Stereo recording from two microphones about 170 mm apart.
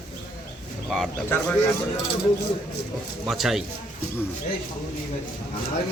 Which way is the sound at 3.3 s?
Centre (ahead or behind).